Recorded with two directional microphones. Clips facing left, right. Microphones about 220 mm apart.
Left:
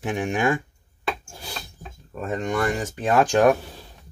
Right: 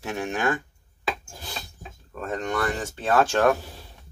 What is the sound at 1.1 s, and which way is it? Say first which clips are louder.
Rub: left 1 dB; 5° left (ahead or behind).